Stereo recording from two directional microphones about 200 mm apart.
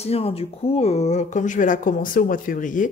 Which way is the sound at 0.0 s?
30° left (ahead or behind).